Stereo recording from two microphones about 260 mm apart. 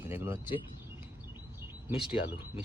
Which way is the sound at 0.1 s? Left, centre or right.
Centre.